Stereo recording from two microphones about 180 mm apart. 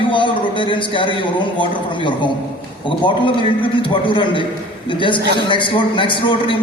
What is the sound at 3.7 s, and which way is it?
A man's voice, 30° left (ahead or behind).